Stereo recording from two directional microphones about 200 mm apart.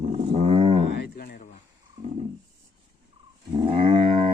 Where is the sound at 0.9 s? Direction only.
50° left (ahead or behind).